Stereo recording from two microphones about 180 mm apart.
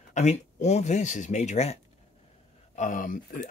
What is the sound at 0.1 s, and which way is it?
Speech, 40° left (ahead or behind).